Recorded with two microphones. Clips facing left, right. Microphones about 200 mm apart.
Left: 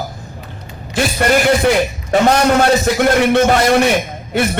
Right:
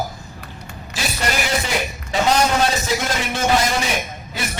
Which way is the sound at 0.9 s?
55° left (ahead or behind).